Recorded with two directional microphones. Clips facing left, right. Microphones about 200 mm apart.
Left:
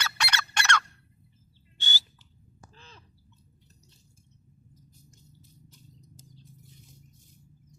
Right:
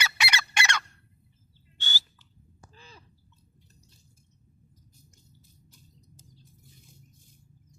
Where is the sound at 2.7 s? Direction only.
5° right (ahead or behind).